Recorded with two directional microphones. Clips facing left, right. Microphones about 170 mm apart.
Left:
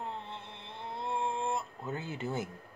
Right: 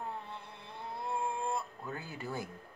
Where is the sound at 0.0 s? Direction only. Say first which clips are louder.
Left 1 dB; 20° left (ahead or behind).